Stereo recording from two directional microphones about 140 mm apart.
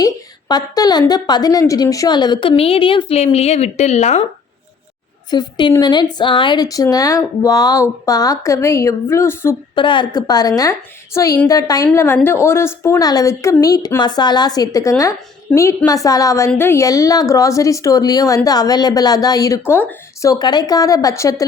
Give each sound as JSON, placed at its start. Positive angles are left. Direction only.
{"t": 0.0, "sound": "a woman's voice", "side_deg": 30}
{"t": 5.3, "sound": "a woman's voice", "side_deg": 30}
{"t": 9.7, "sound": "speech", "side_deg": 35}